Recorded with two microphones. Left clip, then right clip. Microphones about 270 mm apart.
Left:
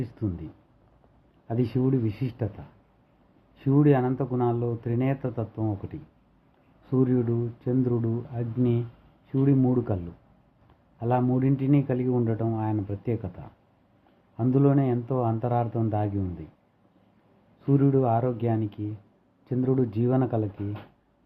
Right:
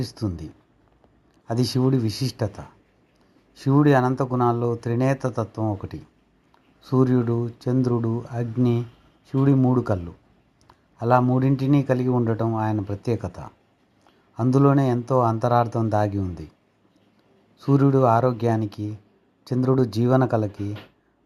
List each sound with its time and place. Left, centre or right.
0.0 s speech: centre
1.5 s speech: right
3.7 s speech: right
6.9 s speech: centre
11.0 s speech: centre
17.7 s speech: centre